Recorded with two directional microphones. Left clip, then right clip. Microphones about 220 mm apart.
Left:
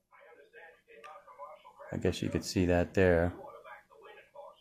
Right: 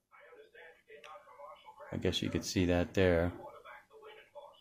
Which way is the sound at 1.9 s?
10° left (ahead or behind).